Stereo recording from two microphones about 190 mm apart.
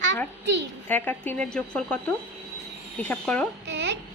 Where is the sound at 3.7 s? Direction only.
70° right (ahead or behind).